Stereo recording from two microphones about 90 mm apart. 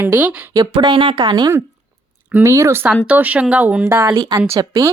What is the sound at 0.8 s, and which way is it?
Speech, 60° right (ahead or behind).